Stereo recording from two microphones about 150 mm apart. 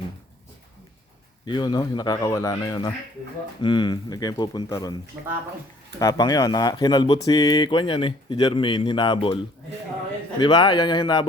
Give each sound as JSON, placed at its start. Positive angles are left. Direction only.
{"t": 1.5, "sound": "speech", "side_deg": 30}
{"t": 6.0, "sound": "speech", "side_deg": 25}
{"t": 10.4, "sound": "speech", "side_deg": 30}